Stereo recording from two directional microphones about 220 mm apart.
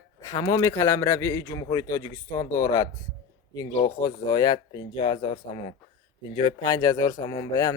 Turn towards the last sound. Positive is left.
turn(degrees=15)  # may be behind; listen again after turning